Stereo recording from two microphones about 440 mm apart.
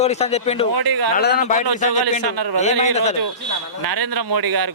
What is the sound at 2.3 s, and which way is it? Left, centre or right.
Speech, right.